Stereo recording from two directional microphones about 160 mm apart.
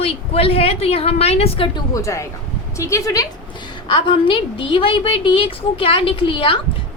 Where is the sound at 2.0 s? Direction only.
20° left (ahead or behind).